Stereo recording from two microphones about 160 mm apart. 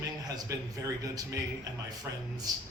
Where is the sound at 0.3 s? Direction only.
20° right (ahead or behind).